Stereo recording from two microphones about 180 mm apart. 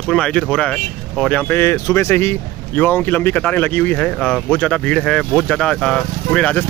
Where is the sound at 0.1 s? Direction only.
5° left (ahead or behind).